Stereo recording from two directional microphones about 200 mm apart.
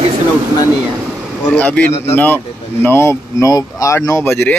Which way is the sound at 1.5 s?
5° left (ahead or behind).